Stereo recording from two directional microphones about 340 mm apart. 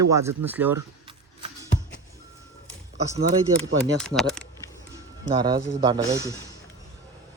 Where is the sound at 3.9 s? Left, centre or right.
Centre.